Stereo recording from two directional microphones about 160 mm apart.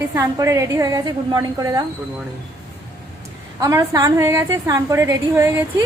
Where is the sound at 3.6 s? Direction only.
20° right (ahead or behind).